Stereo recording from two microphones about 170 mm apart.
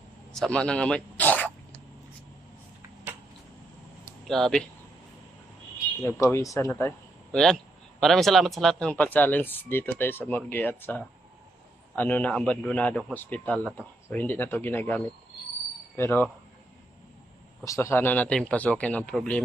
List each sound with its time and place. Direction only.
0.3 s speech: 5° left (ahead or behind)
4.3 s speech: centre (ahead or behind)
6.0 s speech: 20° left (ahead or behind)
7.3 s speech: 5° left (ahead or behind)
17.6 s speech: 15° left (ahead or behind)